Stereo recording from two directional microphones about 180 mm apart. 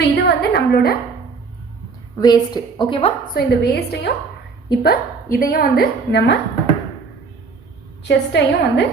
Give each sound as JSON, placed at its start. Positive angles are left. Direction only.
{"t": 0.0, "sound": "a woman's voice", "side_deg": 65}
{"t": 2.1, "sound": "a woman's voice", "side_deg": 20}
{"t": 3.3, "sound": "a woman's voice", "side_deg": 65}
{"t": 8.0, "sound": "a woman's voice", "side_deg": 70}